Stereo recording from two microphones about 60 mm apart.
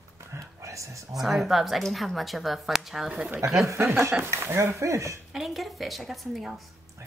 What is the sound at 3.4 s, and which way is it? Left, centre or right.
Speech, right.